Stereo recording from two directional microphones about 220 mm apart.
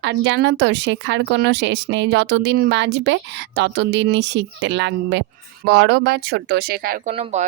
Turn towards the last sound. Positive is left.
turn(degrees=-40)  # may be behind; listen again after turning